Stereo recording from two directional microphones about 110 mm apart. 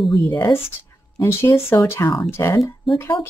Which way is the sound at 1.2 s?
25° left (ahead or behind).